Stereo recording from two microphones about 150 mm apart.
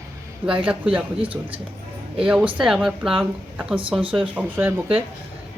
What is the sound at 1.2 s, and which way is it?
Speech, 35° right (ahead or behind).